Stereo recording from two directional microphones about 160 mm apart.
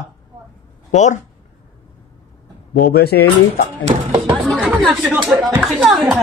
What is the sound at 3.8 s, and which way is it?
Speech, 35° right (ahead or behind).